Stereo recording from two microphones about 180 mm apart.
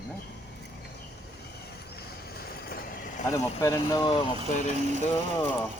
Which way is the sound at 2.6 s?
55° left (ahead or behind).